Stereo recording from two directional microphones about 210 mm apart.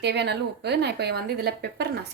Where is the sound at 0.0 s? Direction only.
55° right (ahead or behind).